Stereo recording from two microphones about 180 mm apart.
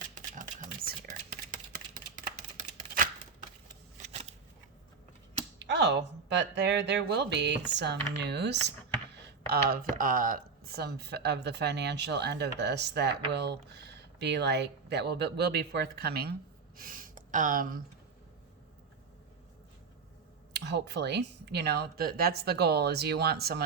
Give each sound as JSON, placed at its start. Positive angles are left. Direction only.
{"t": 0.1, "sound": "a sound", "side_deg": -45}
{"t": 4.0, "sound": "shuffling cards", "side_deg": -35}
{"t": 5.5, "sound": "speech", "side_deg": -75}
{"t": 9.5, "sound": "speech", "side_deg": -55}
{"t": 16.7, "sound": "speech", "side_deg": -50}
{"t": 20.5, "sound": "speech", "side_deg": -70}